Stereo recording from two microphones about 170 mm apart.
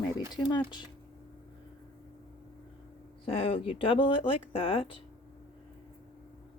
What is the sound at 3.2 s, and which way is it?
Speech, 30° left (ahead or behind).